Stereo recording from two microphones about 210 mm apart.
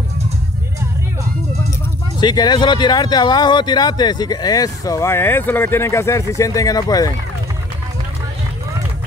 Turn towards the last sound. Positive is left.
turn(degrees=15)  # may be behind; listen again after turning